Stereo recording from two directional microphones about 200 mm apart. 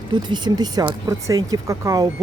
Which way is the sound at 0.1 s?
20° right (ahead or behind).